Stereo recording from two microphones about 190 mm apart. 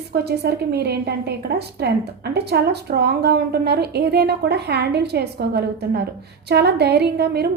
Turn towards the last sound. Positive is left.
turn(degrees=-60)  # may be behind; listen again after turning